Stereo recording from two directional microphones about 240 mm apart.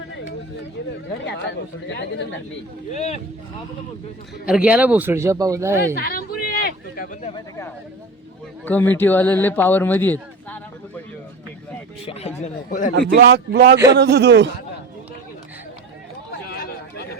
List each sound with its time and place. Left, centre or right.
1.9 s speech: left
2.9 s speech: left
4.4 s a man's voice: centre
6.0 s a sound: left
8.6 s speech: centre
12.4 s speech: left
12.9 s a man's voice: right
16.5 s a sound: left